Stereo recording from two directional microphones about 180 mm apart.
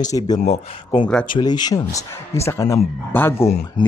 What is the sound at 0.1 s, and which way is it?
Speech, 25° left (ahead or behind).